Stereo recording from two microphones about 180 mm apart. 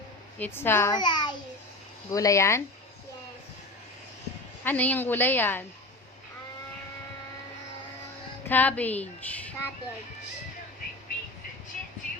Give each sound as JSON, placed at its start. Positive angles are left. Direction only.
{"t": 0.3, "sound": "a woman's voice", "side_deg": 10}
{"t": 0.9, "sound": "a child's voice", "side_deg": 25}
{"t": 4.6, "sound": "a woman's voice", "side_deg": 10}
{"t": 8.4, "sound": "a woman's voice", "side_deg": 10}